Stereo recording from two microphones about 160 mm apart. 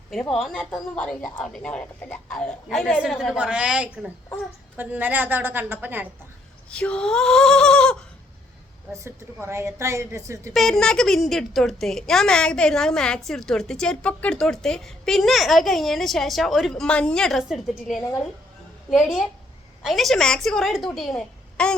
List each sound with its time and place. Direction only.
0.1 s a woman's voice: centre (ahead or behind)
6.7 s a woman's voice: 5° left (ahead or behind)
8.9 s a woman's voice: 15° right (ahead or behind)
10.5 s a woman's voice: centre (ahead or behind)
19.8 s a woman's voice: centre (ahead or behind)